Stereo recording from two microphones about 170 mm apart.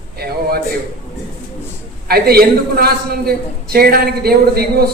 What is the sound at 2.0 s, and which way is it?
A man's voice, 65° right (ahead or behind).